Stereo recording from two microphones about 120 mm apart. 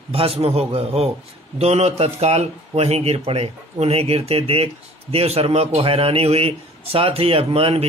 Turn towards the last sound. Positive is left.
turn(degrees=-55)  # may be behind; listen again after turning